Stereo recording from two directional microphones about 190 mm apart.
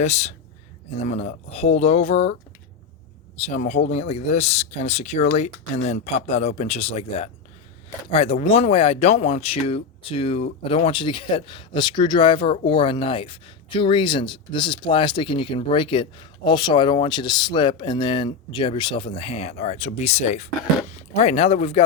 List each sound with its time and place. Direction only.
0.0 s speech: 35° left (ahead or behind)
3.3 s speech: 35° left (ahead or behind)